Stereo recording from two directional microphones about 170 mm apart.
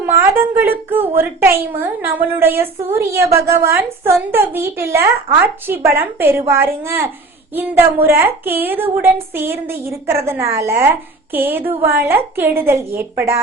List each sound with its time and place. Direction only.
0.0 s a woman's voice: 15° right (ahead or behind)